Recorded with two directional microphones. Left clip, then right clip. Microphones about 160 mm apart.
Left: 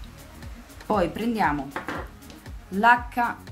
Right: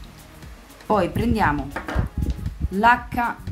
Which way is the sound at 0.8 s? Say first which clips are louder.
Right 3 dB; 10° right (ahead or behind).